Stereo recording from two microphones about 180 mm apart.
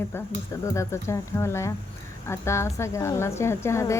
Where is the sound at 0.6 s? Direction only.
15° left (ahead or behind).